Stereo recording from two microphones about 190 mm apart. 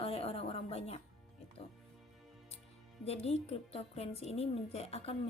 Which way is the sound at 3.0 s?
35° left (ahead or behind).